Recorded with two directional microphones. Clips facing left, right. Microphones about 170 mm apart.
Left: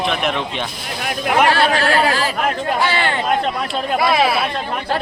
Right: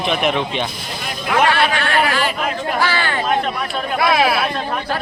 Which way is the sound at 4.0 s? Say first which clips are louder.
Right 1 dB; centre (ahead or behind).